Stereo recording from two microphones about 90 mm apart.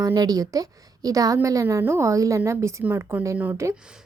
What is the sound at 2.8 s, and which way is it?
Speech, 25° right (ahead or behind).